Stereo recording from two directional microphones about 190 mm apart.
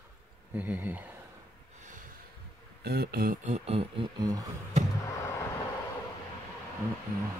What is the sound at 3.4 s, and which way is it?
Speech, 35° right (ahead or behind).